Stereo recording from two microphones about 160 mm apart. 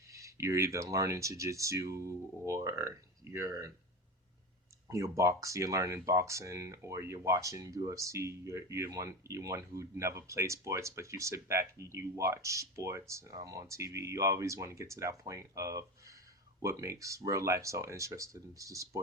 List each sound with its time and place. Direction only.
0.1 s speech: 20° right (ahead or behind)
4.9 s speech: 20° right (ahead or behind)